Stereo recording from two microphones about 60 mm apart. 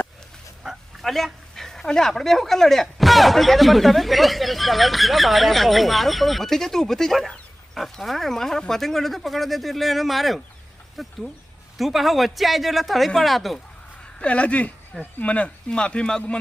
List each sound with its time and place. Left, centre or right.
0.6 s dog: centre
1.1 s speech: centre
14.2 s speech: left